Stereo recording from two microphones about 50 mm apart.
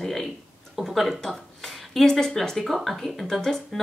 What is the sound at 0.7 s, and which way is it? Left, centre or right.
Speech, centre.